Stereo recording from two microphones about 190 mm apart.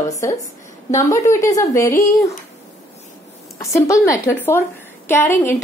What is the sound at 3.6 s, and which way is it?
A woman's voice, 15° left (ahead or behind).